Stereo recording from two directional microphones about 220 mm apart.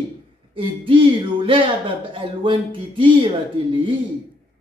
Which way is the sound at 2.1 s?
25° right (ahead or behind).